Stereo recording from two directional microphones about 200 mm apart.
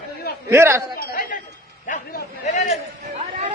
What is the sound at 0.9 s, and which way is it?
A man's voice, 40° left (ahead or behind).